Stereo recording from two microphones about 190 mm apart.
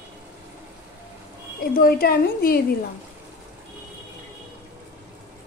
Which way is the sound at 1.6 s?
50° left (ahead or behind).